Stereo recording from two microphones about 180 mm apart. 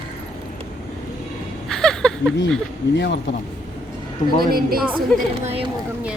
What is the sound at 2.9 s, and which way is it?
Speech, 75° left (ahead or behind).